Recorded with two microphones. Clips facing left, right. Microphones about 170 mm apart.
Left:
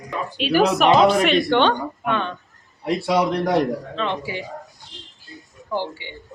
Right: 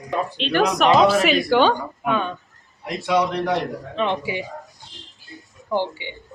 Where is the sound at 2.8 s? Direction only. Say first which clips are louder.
Left 1 dB; 35° left (ahead or behind).